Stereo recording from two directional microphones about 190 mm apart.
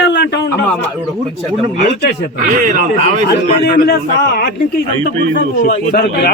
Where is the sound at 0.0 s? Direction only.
65° left (ahead or behind).